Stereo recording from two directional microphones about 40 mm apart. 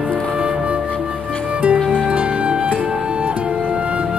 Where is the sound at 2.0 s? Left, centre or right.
Right.